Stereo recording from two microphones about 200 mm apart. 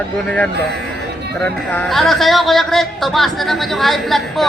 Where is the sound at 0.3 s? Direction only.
10° left (ahead or behind).